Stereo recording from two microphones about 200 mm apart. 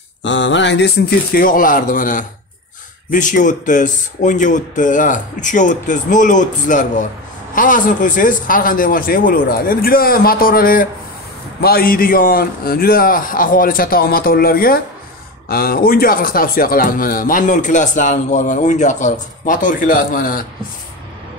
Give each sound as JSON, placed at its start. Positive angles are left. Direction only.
{"t": 0.2, "sound": "speech", "side_deg": 65}